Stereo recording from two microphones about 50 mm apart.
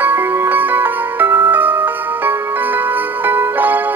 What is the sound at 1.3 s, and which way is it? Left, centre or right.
Music, right.